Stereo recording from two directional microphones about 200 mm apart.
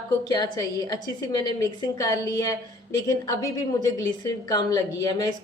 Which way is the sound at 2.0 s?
20° left (ahead or behind).